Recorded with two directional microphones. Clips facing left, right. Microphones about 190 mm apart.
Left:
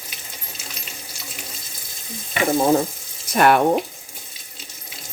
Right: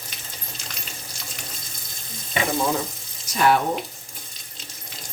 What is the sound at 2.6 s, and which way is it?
Frying, 45° left (ahead or behind).